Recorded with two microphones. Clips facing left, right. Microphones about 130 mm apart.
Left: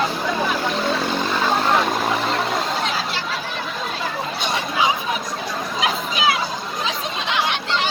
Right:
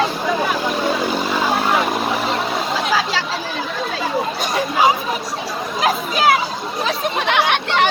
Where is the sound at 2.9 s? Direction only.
90° right.